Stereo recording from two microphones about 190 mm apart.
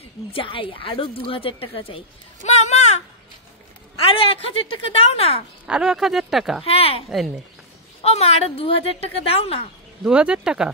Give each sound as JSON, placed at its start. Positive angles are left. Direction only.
{"t": 0.3, "sound": "a woman's voice", "side_deg": 30}
{"t": 4.0, "sound": "a woman's voice", "side_deg": 30}
{"t": 5.7, "sound": "speech", "side_deg": -5}
{"t": 6.6, "sound": "a woman's voice", "side_deg": 30}
{"t": 8.0, "sound": "a woman's voice", "side_deg": 35}
{"t": 10.0, "sound": "speech", "side_deg": -5}